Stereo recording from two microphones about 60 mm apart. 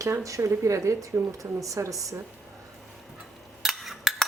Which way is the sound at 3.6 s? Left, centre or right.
Centre.